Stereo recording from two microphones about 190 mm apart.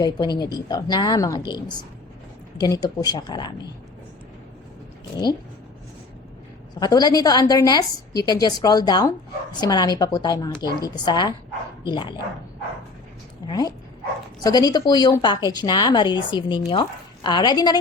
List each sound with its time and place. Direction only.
0.0 s a woman's voice: 20° left (ahead or behind)
6.7 s a woman's voice: 20° left (ahead or behind)
13.5 s a woman's voice: 20° left (ahead or behind)